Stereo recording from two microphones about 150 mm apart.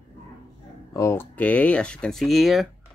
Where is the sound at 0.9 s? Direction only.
20° left (ahead or behind).